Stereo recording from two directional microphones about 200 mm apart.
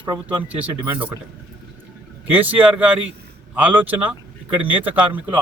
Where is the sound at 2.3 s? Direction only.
10° right (ahead or behind).